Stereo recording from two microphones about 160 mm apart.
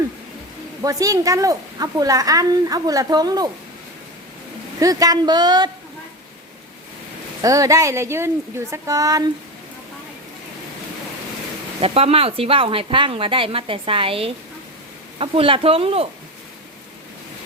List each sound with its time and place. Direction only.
0.8 s a woman's voice: 20° right (ahead or behind)
4.8 s a woman's voice: 20° right (ahead or behind)
7.4 s a woman's voice: 20° right (ahead or behind)
11.8 s speech: 40° right (ahead or behind)